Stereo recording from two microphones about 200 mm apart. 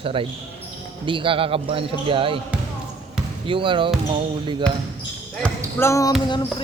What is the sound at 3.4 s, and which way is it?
Speech, 25° right (ahead or behind).